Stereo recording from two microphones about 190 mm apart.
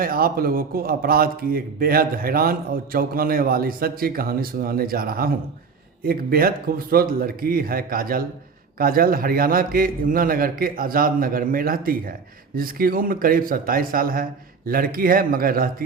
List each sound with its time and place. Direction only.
0.0 s a man's voice: 50° right (ahead or behind)